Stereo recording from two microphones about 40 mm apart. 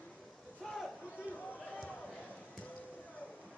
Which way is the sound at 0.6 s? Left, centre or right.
Centre.